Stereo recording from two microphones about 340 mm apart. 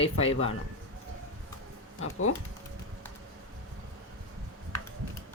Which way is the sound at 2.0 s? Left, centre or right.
Left.